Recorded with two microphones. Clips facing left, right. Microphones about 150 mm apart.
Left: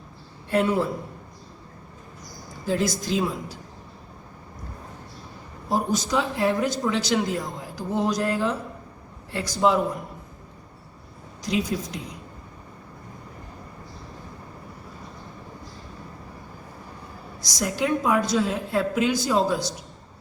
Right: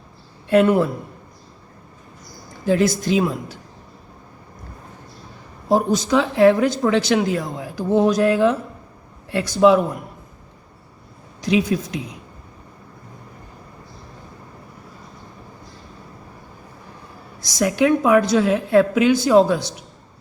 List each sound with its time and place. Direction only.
0.5 s speech: 65° right (ahead or behind)
2.6 s speech: 60° right (ahead or behind)
5.6 s speech: 75° right (ahead or behind)
11.4 s speech: 65° right (ahead or behind)
17.6 s speech: 70° right (ahead or behind)